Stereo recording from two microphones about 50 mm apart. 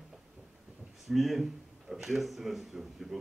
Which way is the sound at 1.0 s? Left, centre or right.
Centre.